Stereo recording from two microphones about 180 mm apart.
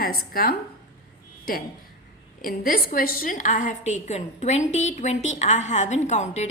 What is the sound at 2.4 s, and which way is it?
A woman's voice, 55° left (ahead or behind).